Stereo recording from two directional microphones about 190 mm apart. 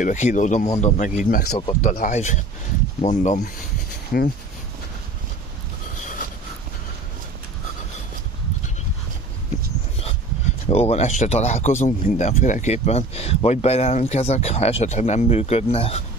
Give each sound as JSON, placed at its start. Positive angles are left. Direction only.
{"t": 0.0, "sound": "speech", "side_deg": 40}
{"t": 10.7, "sound": "speech", "side_deg": 35}